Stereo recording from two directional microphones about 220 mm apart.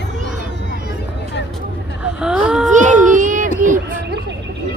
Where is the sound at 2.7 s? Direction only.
35° right (ahead or behind).